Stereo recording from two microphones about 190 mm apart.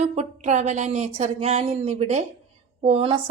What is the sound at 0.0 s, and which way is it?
Speech, 35° right (ahead or behind).